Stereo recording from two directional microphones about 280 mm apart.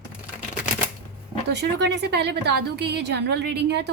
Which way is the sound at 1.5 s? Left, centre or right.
Right.